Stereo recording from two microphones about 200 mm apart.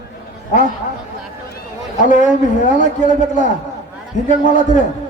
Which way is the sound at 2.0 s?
40° left (ahead or behind).